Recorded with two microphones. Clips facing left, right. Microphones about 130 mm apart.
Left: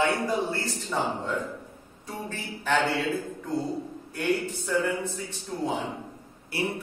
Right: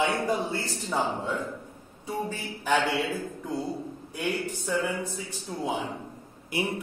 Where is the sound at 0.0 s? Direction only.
15° right (ahead or behind).